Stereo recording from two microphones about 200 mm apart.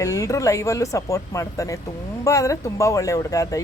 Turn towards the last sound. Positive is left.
turn(degrees=15)  # may be behind; listen again after turning